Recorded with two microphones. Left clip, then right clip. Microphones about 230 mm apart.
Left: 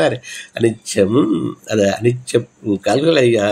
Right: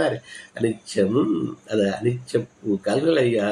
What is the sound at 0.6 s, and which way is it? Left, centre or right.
Speech, left.